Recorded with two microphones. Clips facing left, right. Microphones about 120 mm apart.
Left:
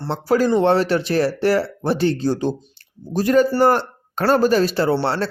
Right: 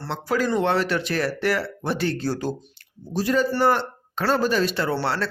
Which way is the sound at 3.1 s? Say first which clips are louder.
Left 6 dB; 50° left (ahead or behind).